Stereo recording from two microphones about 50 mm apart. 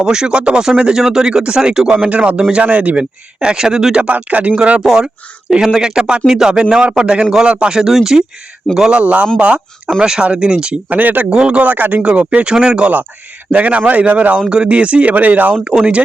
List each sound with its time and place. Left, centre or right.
0.0 s speech: centre
2.0 s speech: right
4.0 s speech: right
4.8 s speech: centre
7.8 s speech: centre
9.0 s speech: right
10.8 s speech: right
11.3 s speech: centre
11.6 s speech: right
12.0 s speech: right
13.5 s speech: right